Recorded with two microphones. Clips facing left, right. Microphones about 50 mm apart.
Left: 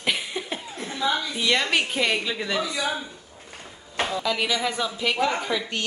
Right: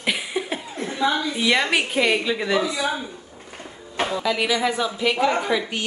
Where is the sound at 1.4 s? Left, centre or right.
Centre.